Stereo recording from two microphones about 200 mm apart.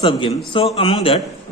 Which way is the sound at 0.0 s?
25° left (ahead or behind).